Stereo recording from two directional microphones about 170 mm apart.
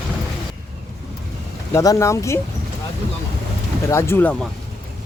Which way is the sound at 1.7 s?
20° left (ahead or behind).